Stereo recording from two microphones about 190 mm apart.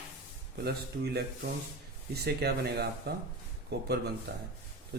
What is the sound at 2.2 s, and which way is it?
A man's voice, 60° right (ahead or behind).